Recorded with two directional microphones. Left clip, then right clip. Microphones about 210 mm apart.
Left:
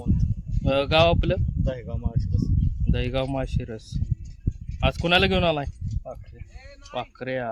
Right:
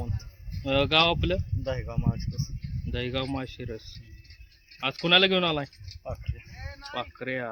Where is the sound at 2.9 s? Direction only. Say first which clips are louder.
Left 4 dB; 55° left (ahead or behind).